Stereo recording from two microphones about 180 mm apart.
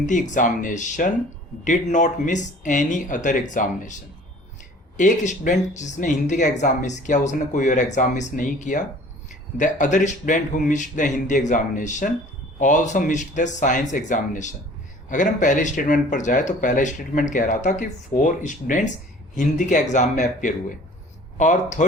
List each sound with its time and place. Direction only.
0.0 s speech: 45° left (ahead or behind)
4.9 s speech: 45° left (ahead or behind)